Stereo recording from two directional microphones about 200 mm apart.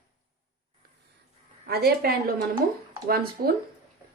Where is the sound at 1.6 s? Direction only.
50° right (ahead or behind).